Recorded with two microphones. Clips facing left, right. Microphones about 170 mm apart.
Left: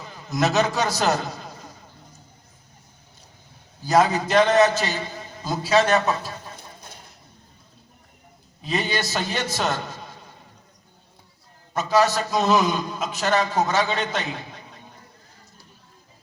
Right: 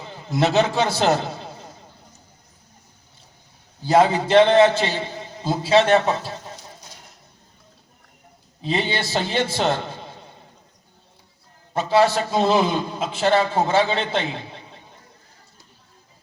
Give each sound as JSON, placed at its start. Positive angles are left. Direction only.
{"t": 0.0, "sound": "a man's voice", "side_deg": -30}
{"t": 3.8, "sound": "a man's voice", "side_deg": -30}
{"t": 6.6, "sound": "horse", "side_deg": 55}
{"t": 8.6, "sound": "a man's voice", "side_deg": -30}
{"t": 11.7, "sound": "a man's voice", "side_deg": -30}